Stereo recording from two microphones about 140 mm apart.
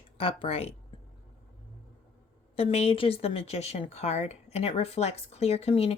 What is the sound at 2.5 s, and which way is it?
Speech, 45° left (ahead or behind).